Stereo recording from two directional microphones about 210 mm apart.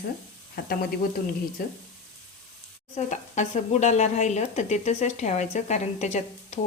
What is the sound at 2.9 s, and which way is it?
Speech, 35° left (ahead or behind).